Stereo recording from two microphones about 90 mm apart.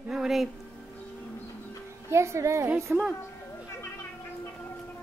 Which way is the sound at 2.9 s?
20° right (ahead or behind).